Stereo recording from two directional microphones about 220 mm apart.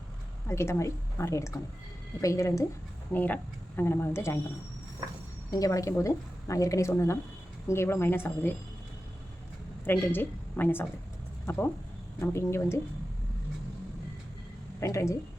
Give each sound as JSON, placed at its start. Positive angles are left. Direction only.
{"t": 0.4, "sound": "speech", "side_deg": 10}
{"t": 5.5, "sound": "speech", "side_deg": 15}
{"t": 9.8, "sound": "a woman's voice", "side_deg": 10}
{"t": 14.8, "sound": "speech", "side_deg": 15}